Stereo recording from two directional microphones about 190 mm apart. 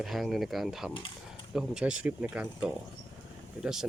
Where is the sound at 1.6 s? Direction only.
5° right (ahead or behind).